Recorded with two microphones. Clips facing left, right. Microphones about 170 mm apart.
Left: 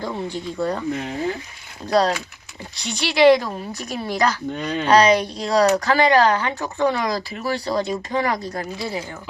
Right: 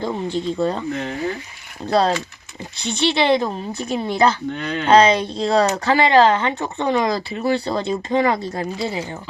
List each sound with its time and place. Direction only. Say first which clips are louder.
0.0 s speech: right 4 dB; 20° right (ahead or behind)
1.9 s speech: right 1 dB; 25° right (ahead or behind)
4.5 s speech: even; 15° left (ahead or behind)
4.9 s speech: right 2 dB; 25° right (ahead or behind)